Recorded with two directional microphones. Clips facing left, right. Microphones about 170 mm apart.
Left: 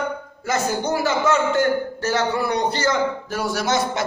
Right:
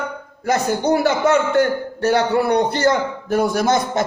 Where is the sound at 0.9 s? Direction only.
60° right (ahead or behind).